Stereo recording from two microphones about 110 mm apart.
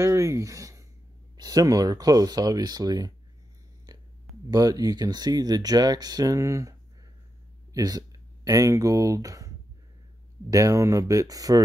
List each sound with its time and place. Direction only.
0.0 s speech: 25° right (ahead or behind)
4.5 s speech: 35° right (ahead or behind)
10.5 s speech: 30° right (ahead or behind)